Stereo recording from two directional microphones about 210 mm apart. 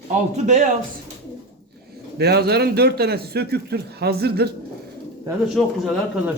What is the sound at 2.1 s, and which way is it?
A man's voice, 50° right (ahead or behind).